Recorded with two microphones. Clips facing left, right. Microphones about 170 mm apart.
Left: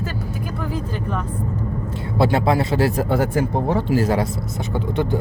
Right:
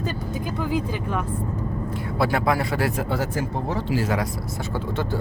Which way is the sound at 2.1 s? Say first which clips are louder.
Left 4 dB; 25° left (ahead or behind).